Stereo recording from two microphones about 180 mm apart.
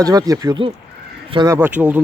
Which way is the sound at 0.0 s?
20° right (ahead or behind).